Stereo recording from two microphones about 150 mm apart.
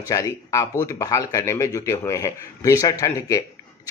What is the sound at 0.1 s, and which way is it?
Speech, 20° left (ahead or behind).